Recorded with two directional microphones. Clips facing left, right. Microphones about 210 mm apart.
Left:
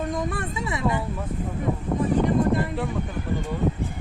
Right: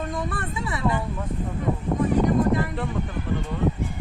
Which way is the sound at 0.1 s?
15° left (ahead or behind).